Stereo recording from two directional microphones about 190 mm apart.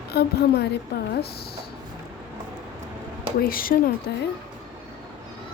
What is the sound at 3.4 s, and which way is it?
Speech, 50° left (ahead or behind).